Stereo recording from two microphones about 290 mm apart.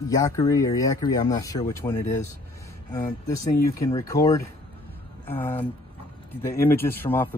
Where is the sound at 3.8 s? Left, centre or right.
Centre.